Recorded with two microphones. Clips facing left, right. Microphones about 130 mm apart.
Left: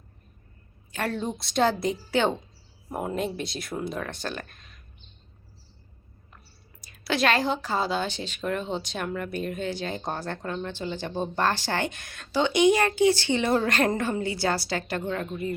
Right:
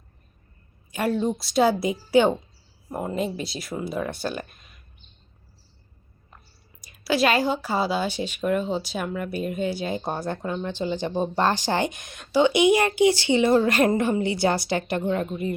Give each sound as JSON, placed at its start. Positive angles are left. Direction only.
{"t": 0.9, "sound": "speech", "side_deg": -10}
{"t": 1.2, "sound": "a woman's voice", "side_deg": 0}
{"t": 2.9, "sound": "speech", "side_deg": 0}
{"t": 7.0, "sound": "a woman's voice", "side_deg": -5}